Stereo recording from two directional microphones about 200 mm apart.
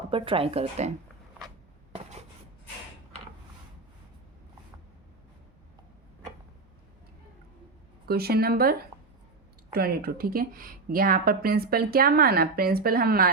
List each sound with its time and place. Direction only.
0.1 s speech: 25° right (ahead or behind)
1.9 s writing: 30° right (ahead or behind)
8.0 s a woman's voice: 50° right (ahead or behind)
9.7 s a woman's voice: 50° right (ahead or behind)